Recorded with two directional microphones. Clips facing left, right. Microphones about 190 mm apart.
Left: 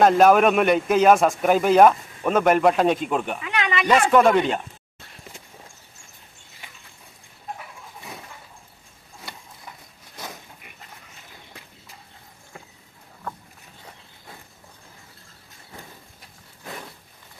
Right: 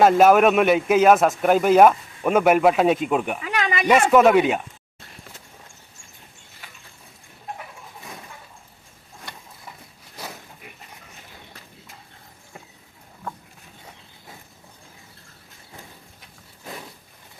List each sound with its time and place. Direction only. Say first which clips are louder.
0.0 s speech: right 1 dB; 5° right (ahead or behind)
3.4 s a sound: right 1 dB; 40° right (ahead or behind)
4.1 s speech: right 3 dB; 5° right (ahead or behind)